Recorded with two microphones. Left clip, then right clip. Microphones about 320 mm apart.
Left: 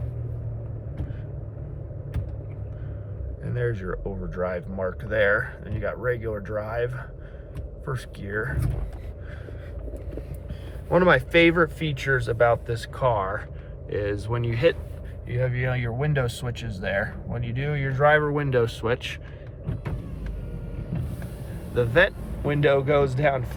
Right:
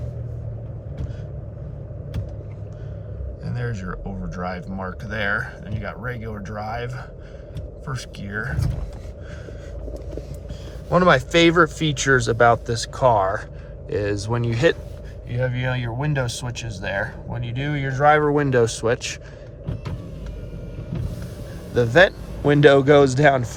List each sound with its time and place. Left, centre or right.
3.4 s speech: centre
10.9 s speech: centre
21.8 s speech: centre